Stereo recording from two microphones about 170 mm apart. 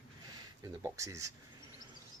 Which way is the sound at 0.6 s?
15° right (ahead or behind).